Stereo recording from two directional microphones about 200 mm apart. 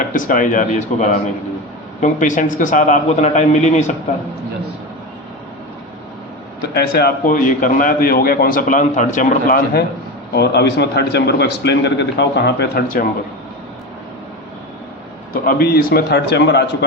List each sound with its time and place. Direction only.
0.1 s a man's voice: 40° left (ahead or behind)
6.7 s a man's voice: 50° left (ahead or behind)
10.3 s a man's voice: 60° left (ahead or behind)
15.3 s a man's voice: 45° left (ahead or behind)